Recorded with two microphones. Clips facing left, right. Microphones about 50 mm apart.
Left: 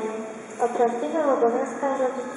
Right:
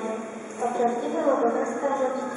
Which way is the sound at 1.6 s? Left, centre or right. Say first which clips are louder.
Left 1 dB; centre.